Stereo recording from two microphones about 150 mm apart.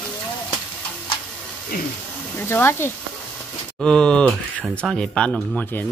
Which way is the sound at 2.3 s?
15° left (ahead or behind).